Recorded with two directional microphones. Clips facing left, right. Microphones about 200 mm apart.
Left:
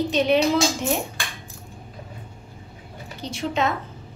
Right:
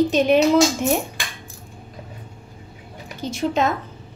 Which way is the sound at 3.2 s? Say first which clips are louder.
Right 4 dB; 45° right (ahead or behind).